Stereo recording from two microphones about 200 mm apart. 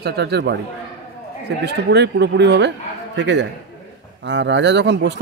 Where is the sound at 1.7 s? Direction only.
55° right (ahead or behind).